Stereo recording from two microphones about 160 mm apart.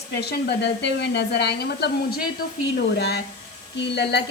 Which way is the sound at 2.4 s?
70° left (ahead or behind).